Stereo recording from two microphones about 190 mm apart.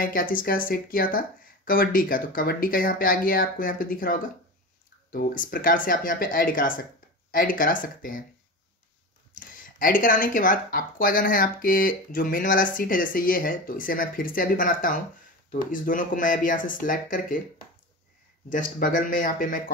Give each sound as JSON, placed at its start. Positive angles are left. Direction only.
{"t": 0.0, "sound": "speech", "side_deg": 45}
{"t": 9.3, "sound": "speech", "side_deg": 45}
{"t": 18.5, "sound": "speech", "side_deg": 45}